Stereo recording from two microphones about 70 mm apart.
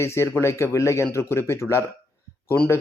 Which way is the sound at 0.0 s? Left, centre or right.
Left.